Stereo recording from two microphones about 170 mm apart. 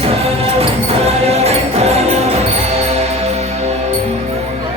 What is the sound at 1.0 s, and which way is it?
Music, 40° right (ahead or behind).